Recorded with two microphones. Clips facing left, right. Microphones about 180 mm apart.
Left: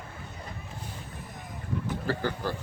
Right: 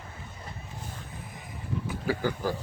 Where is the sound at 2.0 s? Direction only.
10° right (ahead or behind).